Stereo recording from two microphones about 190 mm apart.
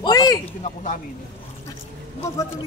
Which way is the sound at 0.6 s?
40° left (ahead or behind).